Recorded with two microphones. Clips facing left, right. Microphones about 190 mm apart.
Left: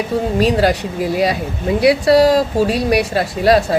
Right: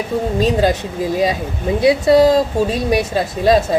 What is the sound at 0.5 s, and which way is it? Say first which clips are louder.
A woman's voice: left 1 dB; 20° right (ahead or behind).